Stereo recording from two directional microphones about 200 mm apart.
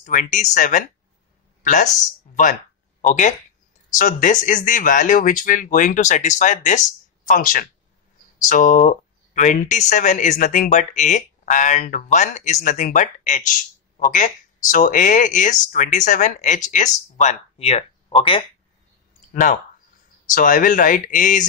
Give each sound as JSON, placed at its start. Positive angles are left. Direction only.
{"t": 0.0, "sound": "speech", "side_deg": 40}
{"t": 3.0, "sound": "speech", "side_deg": 40}
{"t": 19.3, "sound": "speech", "side_deg": 40}